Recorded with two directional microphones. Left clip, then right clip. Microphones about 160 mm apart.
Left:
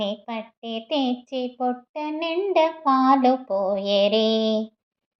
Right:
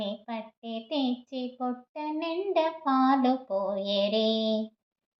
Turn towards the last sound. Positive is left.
turn(degrees=25)  # may be behind; listen again after turning